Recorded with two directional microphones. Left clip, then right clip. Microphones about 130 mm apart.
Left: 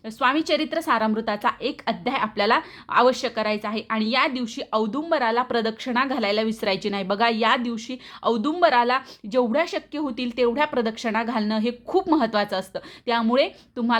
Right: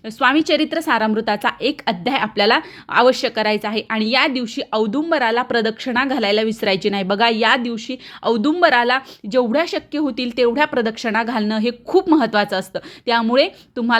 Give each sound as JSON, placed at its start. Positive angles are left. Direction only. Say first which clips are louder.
{"t": 0.0, "sound": "a woman's voice", "louder": "right 6 dB", "side_deg": -25}